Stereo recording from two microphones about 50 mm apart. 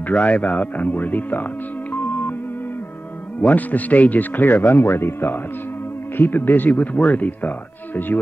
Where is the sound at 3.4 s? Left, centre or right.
Left.